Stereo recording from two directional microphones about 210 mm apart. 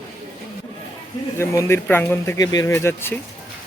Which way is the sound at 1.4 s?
10° left (ahead or behind).